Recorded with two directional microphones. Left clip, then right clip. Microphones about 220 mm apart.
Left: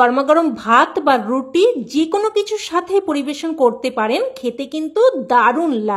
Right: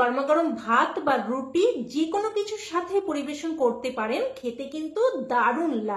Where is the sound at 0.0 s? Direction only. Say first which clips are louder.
Left 9 dB; 45° left (ahead or behind).